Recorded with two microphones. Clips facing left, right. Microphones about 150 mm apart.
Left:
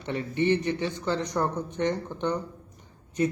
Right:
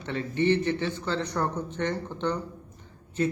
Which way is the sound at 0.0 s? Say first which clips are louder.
Even; 15° left (ahead or behind).